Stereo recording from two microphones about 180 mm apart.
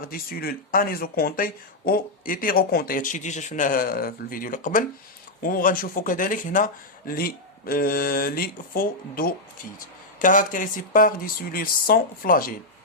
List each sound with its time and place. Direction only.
0.0 s speech: 55° left (ahead or behind)